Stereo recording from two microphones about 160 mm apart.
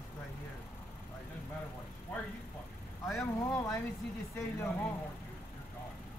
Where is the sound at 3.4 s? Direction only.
20° left (ahead or behind).